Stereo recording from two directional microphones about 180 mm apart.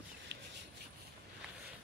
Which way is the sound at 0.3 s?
70° right (ahead or behind).